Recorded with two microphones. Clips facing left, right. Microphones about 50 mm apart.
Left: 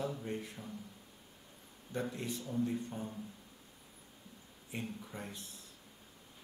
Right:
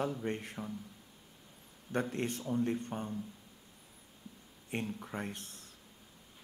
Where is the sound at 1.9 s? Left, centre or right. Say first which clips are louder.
Right 4 dB; right.